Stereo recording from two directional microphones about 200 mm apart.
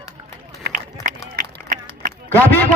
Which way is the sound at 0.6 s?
45° right (ahead or behind).